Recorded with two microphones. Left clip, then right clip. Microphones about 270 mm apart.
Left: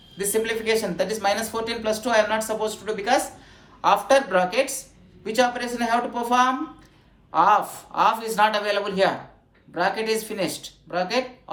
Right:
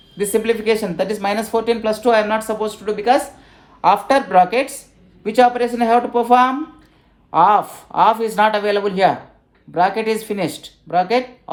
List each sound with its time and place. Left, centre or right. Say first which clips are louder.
0.2 s speech: right 6 dB; right